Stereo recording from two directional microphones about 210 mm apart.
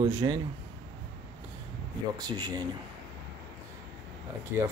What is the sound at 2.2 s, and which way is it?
Speech, 20° right (ahead or behind).